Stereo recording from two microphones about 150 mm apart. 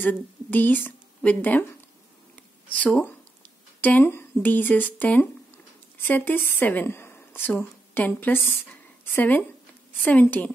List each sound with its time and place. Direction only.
0.0 s a woman's voice: 10° left (ahead or behind)
2.3 s a sound: 10° left (ahead or behind)
3.8 s a woman's voice: 15° left (ahead or behind)